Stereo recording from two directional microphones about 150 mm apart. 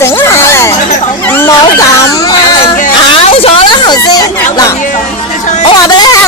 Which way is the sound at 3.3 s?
40° left (ahead or behind).